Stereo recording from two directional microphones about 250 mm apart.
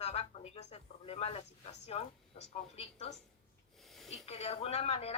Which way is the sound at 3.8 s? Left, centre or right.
Centre.